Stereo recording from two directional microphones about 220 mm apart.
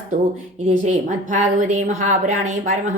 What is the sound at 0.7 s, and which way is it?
A woman's voice, 35° right (ahead or behind).